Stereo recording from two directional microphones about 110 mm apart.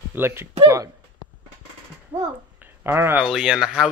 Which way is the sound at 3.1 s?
5° right (ahead or behind).